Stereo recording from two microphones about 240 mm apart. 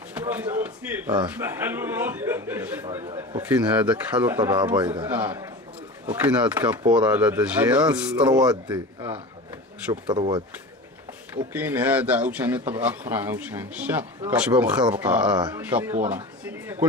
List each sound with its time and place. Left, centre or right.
0.1 s speech: centre
5.0 s speech: centre
8.7 s speech: centre
11.5 s speech: centre
15.3 s speech: centre